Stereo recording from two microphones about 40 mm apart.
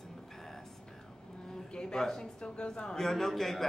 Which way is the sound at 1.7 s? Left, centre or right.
Left.